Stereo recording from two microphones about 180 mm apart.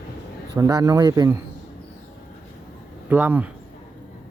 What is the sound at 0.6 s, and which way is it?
Speech, 20° right (ahead or behind).